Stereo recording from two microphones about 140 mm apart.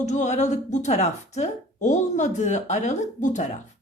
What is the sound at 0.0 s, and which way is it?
Speech, 55° left (ahead or behind).